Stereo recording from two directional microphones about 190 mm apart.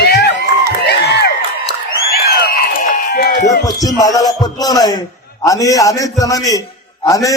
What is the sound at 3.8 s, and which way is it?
A man's voice, 20° left (ahead or behind).